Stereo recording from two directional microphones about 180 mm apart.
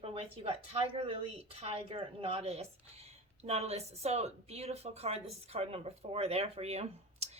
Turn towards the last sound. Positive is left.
turn(degrees=-35)  # may be behind; listen again after turning